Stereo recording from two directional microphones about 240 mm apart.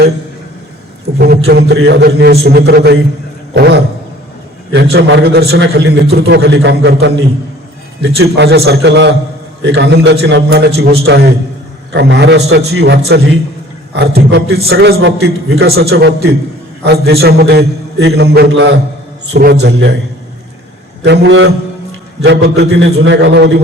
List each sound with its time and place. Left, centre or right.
1.2 s a man's voice: right
3.5 s a sound: right
4.7 s a man's voice: right
21.0 s a man's voice: right